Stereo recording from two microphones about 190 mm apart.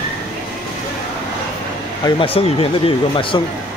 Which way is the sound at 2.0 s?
30° left (ahead or behind).